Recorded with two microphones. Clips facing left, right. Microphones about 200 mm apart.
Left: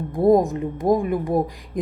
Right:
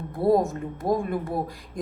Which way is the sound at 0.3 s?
15° left (ahead or behind).